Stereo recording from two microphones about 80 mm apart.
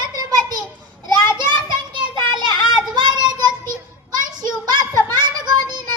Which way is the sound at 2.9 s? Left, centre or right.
Right.